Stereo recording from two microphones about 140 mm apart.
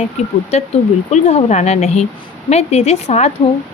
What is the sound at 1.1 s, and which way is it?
Speech, 50° left (ahead or behind).